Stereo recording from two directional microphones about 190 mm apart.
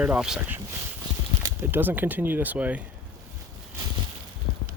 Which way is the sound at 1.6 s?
10° right (ahead or behind).